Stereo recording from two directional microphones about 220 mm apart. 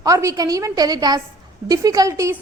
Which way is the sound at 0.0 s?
15° right (ahead or behind).